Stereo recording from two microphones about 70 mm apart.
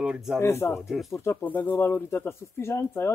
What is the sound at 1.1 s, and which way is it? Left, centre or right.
Speech, left.